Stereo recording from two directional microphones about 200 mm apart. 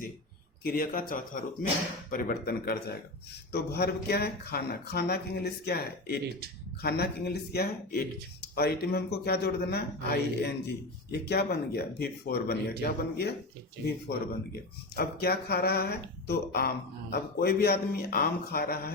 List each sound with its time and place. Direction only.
0.6 s speech: 45° left (ahead or behind)